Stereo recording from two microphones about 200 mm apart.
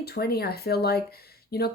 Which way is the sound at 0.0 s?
50° left (ahead or behind).